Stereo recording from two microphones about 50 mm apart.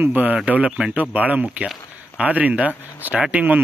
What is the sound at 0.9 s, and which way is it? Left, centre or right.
Speech, right.